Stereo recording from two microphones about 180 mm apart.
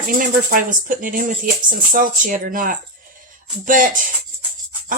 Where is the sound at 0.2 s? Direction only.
50° right (ahead or behind).